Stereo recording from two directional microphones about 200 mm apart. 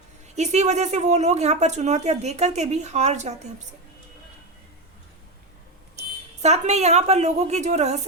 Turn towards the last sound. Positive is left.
turn(degrees=-35)  # may be behind; listen again after turning